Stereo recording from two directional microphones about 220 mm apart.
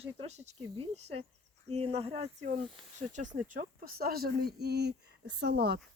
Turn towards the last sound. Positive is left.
turn(degrees=-50)  # may be behind; listen again after turning